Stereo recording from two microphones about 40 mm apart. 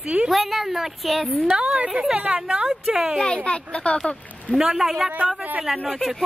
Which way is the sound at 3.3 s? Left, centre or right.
Left.